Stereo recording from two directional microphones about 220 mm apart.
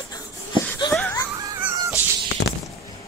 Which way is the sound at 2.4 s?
50° left (ahead or behind).